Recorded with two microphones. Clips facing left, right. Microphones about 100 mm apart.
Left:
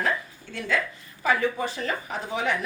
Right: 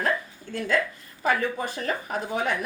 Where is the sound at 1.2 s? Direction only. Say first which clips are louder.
Left 1 dB; 50° right (ahead or behind).